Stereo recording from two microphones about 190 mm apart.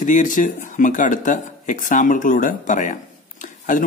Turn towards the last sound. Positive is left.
turn(degrees=45)  # may be behind; listen again after turning